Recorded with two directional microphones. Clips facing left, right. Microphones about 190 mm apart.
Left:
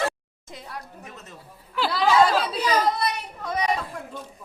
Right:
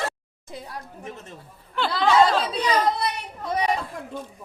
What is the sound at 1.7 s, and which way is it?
Chatter, 5° left (ahead or behind).